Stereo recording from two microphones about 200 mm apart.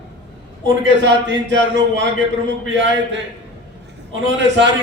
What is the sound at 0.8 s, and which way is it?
A man's voice, 65° right (ahead or behind).